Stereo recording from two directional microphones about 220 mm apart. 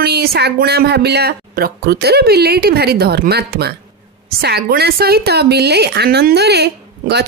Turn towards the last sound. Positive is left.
turn(degrees=-50)  # may be behind; listen again after turning